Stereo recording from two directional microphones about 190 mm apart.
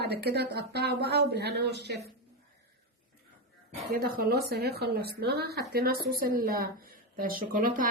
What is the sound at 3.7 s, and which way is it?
A woman's voice, 55° right (ahead or behind).